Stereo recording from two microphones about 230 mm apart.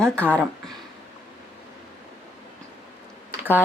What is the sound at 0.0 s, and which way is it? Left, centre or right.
Speech, centre.